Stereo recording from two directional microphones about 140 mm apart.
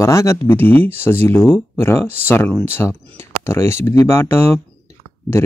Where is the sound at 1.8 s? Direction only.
15° left (ahead or behind).